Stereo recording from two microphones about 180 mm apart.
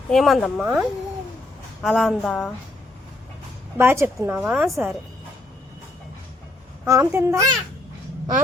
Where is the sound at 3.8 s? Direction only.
15° right (ahead or behind).